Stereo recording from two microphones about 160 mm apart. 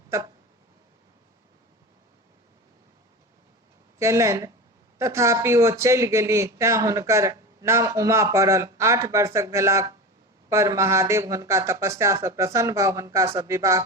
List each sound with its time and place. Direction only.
0.1 s speech: 15° right (ahead or behind)
3.9 s a man's voice: 20° right (ahead or behind)